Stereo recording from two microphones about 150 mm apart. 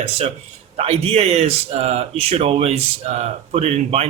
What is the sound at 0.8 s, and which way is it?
Speech, 40° right (ahead or behind).